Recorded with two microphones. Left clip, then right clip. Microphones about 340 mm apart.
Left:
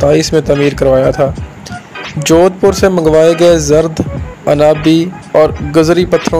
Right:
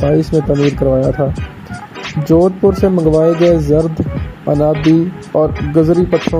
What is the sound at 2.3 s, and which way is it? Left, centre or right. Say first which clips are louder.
Speech: left 3 dB; left.